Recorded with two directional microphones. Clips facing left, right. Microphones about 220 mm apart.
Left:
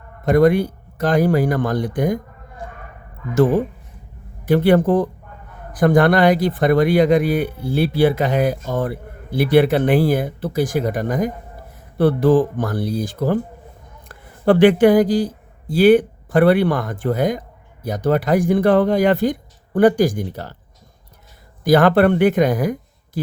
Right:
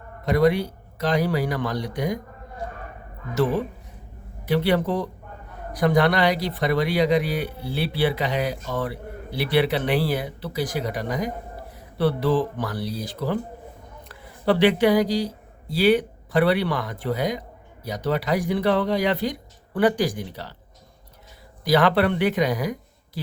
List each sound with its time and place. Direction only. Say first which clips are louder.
0.3 s speech: left 6 dB; 50° left (ahead or behind)
3.3 s speech: left 7 dB; 50° left (ahead or behind)
21.6 s speech: left 6 dB; 50° left (ahead or behind)